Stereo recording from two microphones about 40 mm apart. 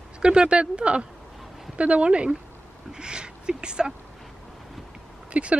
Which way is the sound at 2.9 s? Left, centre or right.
Right.